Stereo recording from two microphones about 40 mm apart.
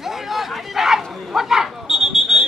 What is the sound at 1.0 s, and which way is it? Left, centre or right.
Speech, centre.